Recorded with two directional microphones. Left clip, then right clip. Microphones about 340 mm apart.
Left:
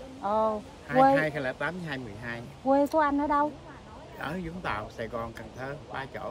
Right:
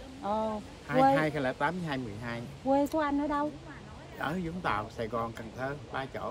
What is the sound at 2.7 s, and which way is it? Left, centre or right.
Speech, centre.